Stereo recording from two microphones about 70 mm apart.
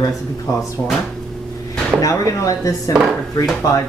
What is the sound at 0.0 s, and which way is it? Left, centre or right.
Speech, left.